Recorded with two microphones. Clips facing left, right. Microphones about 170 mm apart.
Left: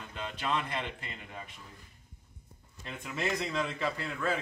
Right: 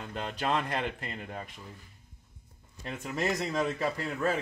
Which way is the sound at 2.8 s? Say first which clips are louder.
Right 3 dB; 40° right (ahead or behind).